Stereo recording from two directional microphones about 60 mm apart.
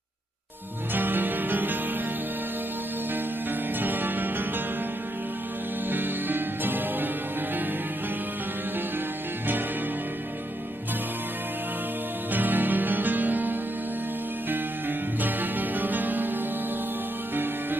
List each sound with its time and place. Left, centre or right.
0.9 s music: right
3.8 s music: right
5.9 s music: right
12.3 s music: right
17.3 s music: right